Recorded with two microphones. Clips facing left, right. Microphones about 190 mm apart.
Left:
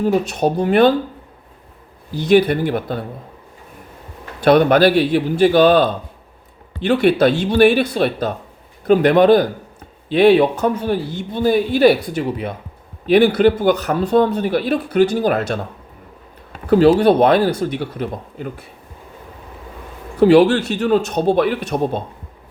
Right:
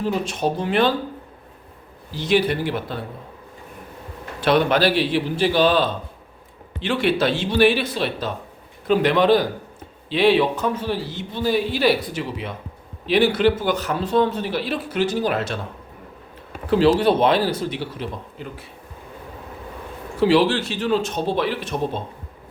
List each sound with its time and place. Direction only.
0.0 s speech: 45° left (ahead or behind)
2.3 s speech: 45° left (ahead or behind)
4.4 s speech: 50° left (ahead or behind)
13.7 s speech: 45° left (ahead or behind)
16.6 s speech: 45° left (ahead or behind)
20.1 s speech: 45° left (ahead or behind)